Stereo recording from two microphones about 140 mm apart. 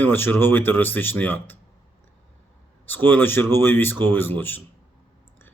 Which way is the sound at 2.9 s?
15° left (ahead or behind).